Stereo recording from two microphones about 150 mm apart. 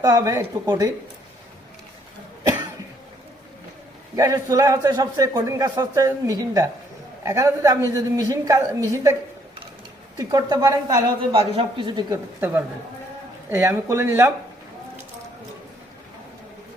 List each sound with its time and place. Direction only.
0.0 s a man's voice: 20° right (ahead or behind)
4.1 s a man's voice: 25° right (ahead or behind)
10.2 s a man's voice: 25° right (ahead or behind)
11.3 s a man's voice: 35° right (ahead or behind)
12.1 s speech: 15° right (ahead or behind)